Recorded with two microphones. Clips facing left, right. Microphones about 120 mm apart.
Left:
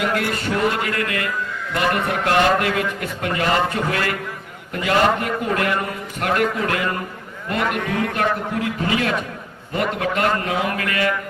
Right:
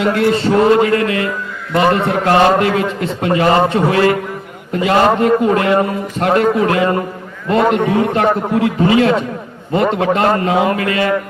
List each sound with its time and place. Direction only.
0.0 s a man's voice: 25° right (ahead or behind)